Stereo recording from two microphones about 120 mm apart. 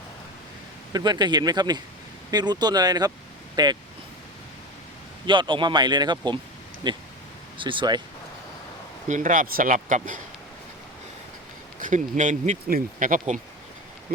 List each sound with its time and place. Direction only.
0.9 s speech: 35° right (ahead or behind)
5.2 s speech: 40° right (ahead or behind)
9.0 s speech: 90° right
11.8 s speech: 90° right